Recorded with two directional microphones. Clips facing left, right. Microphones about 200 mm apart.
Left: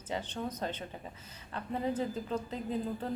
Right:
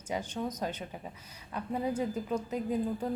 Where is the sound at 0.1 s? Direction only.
10° right (ahead or behind).